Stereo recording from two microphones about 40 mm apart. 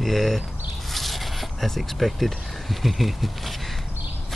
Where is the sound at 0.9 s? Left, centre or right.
Centre.